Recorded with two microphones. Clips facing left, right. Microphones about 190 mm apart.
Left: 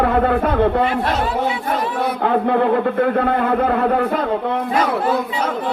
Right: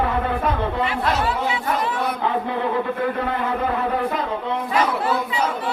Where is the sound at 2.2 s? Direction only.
60° left (ahead or behind).